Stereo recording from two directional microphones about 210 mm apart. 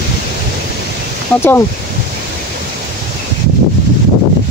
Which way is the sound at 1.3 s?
10° left (ahead or behind).